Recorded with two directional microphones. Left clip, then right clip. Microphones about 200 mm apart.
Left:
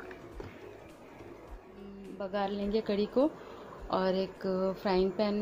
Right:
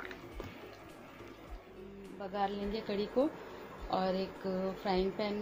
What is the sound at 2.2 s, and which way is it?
A woman's voice, 50° left (ahead or behind).